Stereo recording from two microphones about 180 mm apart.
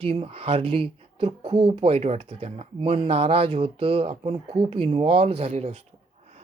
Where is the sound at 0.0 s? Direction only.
30° right (ahead or behind).